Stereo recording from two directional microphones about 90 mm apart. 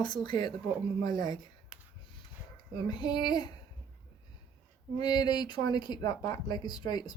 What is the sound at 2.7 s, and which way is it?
Speech, 55° left (ahead or behind).